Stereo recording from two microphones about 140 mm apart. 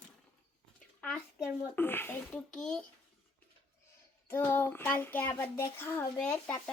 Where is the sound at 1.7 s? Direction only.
15° left (ahead or behind).